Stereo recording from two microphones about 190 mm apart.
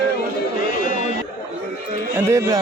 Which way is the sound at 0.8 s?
45° left (ahead or behind).